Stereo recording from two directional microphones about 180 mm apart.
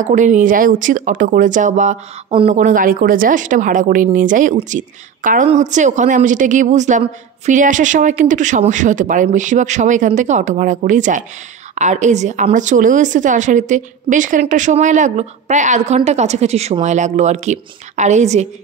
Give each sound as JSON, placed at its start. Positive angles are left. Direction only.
{"t": 0.0, "sound": "a woman's voice", "side_deg": -45}